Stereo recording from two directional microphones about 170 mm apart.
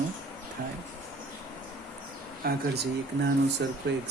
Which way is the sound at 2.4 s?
70° right (ahead or behind).